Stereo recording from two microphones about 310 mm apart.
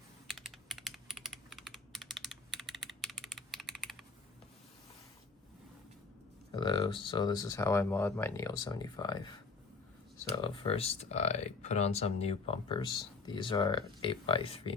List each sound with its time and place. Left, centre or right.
0.3 s typing: centre
6.5 s speech: centre